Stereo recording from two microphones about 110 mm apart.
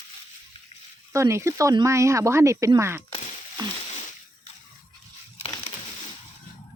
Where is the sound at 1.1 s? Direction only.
25° right (ahead or behind).